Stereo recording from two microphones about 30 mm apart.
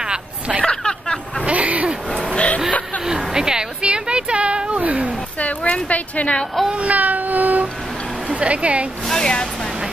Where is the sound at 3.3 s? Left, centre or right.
Right.